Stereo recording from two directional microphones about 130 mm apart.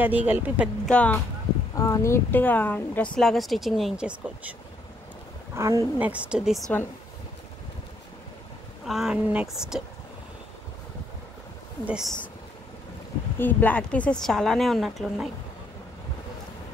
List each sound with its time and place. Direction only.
0.0 s speech: 15° right (ahead or behind)
0.8 s speech: 10° left (ahead or behind)
1.8 s speech: 25° left (ahead or behind)
3.2 s a woman's voice: centre (ahead or behind)
5.6 s speech: 20° right (ahead or behind)
8.8 s a woman's voice: 5° right (ahead or behind)
11.8 s speech: 5° right (ahead or behind)
13.4 s a woman's voice: 15° left (ahead or behind)